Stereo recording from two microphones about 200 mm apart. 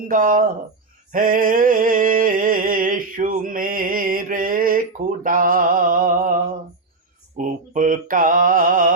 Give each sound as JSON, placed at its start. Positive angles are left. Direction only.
{"t": 0.1, "sound": "speech", "side_deg": -45}
{"t": 1.1, "sound": "a sound", "side_deg": -45}
{"t": 5.2, "sound": "mantra", "side_deg": -45}
{"t": 7.3, "sound": "mantra", "side_deg": -40}